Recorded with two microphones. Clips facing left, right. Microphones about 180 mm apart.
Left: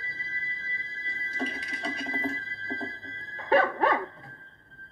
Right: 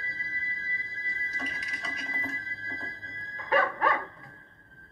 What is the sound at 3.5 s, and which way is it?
Dog, 30° left (ahead or behind).